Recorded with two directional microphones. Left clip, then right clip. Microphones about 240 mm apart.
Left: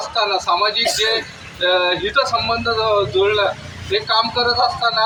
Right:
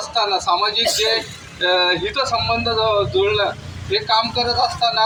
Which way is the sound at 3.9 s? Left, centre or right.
Right.